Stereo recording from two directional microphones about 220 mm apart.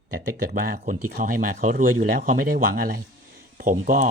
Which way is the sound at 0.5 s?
40° right (ahead or behind).